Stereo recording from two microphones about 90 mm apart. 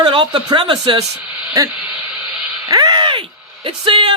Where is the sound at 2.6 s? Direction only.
45° right (ahead or behind).